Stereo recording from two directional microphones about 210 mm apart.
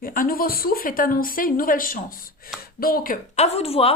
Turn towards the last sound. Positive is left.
turn(degrees=30)  # may be behind; listen again after turning